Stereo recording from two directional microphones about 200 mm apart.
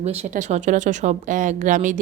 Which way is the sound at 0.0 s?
35° right (ahead or behind).